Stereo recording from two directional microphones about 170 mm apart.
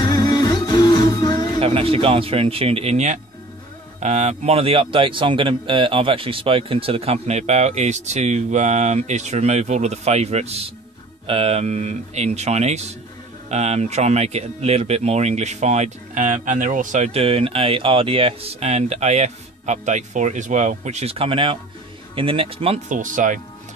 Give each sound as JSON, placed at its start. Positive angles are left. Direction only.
{"t": 0.0, "sound": "music", "side_deg": 25}
{"t": 1.6, "sound": "speech", "side_deg": -35}
{"t": 22.8, "sound": "speech", "side_deg": -50}